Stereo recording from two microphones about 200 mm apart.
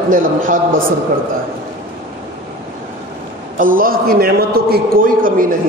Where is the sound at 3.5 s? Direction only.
45° right (ahead or behind).